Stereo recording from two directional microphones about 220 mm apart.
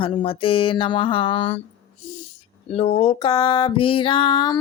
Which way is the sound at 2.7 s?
25° left (ahead or behind).